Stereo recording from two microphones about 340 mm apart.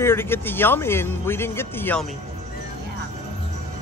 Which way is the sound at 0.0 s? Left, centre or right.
Centre.